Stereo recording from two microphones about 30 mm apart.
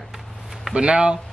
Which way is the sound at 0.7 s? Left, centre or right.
Right.